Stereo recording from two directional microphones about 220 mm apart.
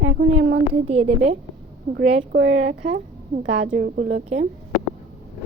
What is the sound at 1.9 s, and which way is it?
Speech, 55° right (ahead or behind).